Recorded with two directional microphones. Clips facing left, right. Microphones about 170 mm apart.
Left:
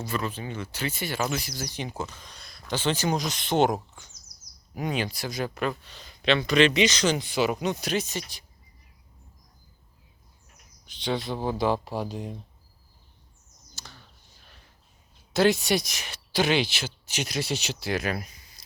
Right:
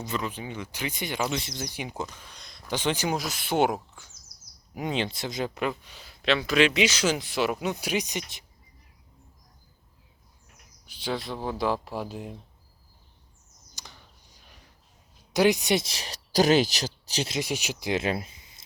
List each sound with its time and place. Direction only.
0.0 s speech: 20° right (ahead or behind)
4.7 s speech: 20° right (ahead or behind)
10.8 s speech: 5° right (ahead or behind)
13.7 s a sound: 15° right (ahead or behind)
15.3 s speech: 15° right (ahead or behind); by 17.3 s 35° right (ahead or behind)
17.3 s speech: 10° right (ahead or behind)